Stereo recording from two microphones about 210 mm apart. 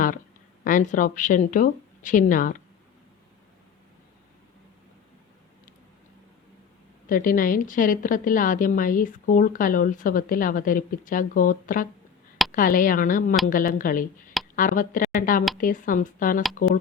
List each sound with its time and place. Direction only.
0.6 s a woman's voice: 40° left (ahead or behind)
7.1 s a woman's voice: 40° left (ahead or behind)